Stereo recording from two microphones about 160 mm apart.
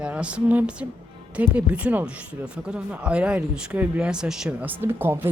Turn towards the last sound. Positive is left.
turn(degrees=-15)  # may be behind; listen again after turning